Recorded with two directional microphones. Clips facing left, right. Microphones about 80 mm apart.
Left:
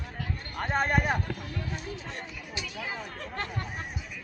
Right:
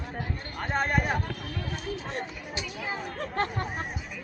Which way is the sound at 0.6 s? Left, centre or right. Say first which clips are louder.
Left 1 dB; centre.